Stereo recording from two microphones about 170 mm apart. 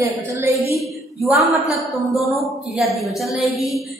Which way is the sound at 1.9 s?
Centre (ahead or behind).